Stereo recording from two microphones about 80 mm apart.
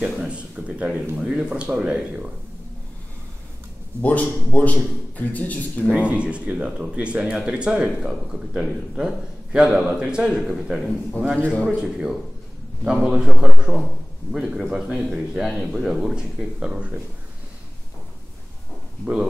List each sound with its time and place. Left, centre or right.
0.0 s a sound: centre
1.1 s speech: centre
4.0 s a man's voice: centre
5.9 s a man's voice: centre
11.3 s a man's voice: centre
11.6 s speech: centre